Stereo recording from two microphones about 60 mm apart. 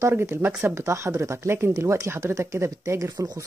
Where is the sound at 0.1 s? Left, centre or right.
Right.